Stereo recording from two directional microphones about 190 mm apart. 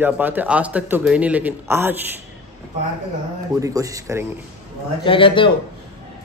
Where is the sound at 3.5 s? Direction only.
20° right (ahead or behind).